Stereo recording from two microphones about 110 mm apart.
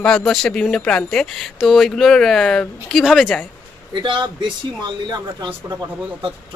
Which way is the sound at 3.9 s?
45° right (ahead or behind).